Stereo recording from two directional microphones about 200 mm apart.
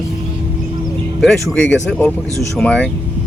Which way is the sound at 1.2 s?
Centre (ahead or behind).